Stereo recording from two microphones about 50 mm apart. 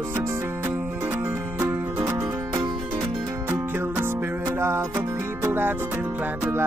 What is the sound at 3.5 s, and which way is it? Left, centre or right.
Music, right.